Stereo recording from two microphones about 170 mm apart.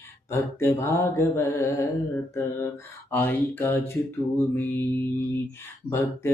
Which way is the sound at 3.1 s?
10° left (ahead or behind).